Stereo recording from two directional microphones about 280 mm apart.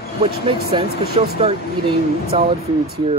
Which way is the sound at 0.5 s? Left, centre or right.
Centre.